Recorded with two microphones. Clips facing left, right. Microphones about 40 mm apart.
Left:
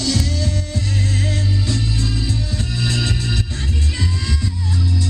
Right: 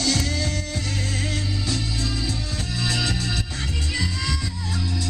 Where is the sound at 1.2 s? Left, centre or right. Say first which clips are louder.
Left 4 dB; centre.